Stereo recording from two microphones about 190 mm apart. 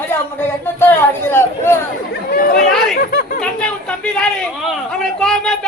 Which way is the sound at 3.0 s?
50° left (ahead or behind).